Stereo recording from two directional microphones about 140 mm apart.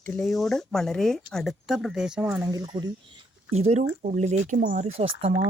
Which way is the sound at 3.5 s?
50° right (ahead or behind).